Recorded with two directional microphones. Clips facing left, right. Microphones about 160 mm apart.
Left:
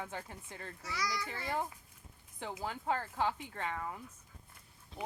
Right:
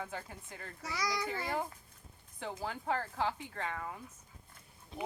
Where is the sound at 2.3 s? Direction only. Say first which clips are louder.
Right 1 dB; 15° left (ahead or behind).